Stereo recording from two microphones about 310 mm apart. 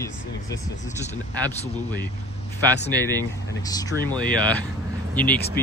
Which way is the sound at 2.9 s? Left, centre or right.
Centre.